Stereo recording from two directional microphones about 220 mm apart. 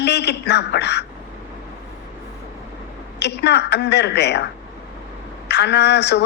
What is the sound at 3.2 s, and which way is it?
Speech, 50° left (ahead or behind).